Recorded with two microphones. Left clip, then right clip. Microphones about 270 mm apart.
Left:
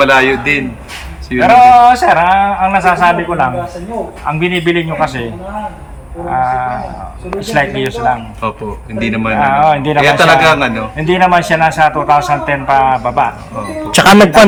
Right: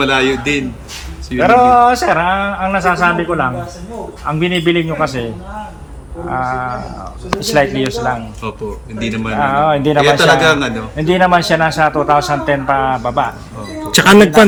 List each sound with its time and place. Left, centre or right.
0.0 s a man's voice: centre
1.4 s a man's voice: centre
6.2 s a man's voice: centre
9.0 s a man's voice: centre
9.3 s a man's voice: centre
10.0 s a man's voice: centre
10.9 s a man's voice: centre
13.9 s a man's voice: centre